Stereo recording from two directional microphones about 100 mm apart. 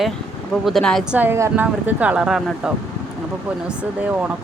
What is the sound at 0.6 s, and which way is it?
Speech, 5° left (ahead or behind).